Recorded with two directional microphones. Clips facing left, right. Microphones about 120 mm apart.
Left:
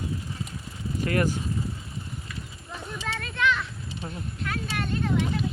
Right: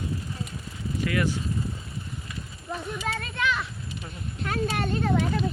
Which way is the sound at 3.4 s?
10° right (ahead or behind).